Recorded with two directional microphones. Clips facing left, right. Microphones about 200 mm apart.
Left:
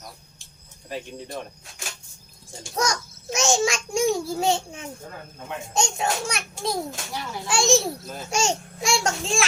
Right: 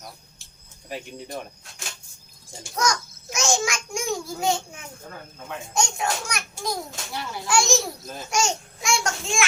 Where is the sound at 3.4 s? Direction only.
20° left (ahead or behind).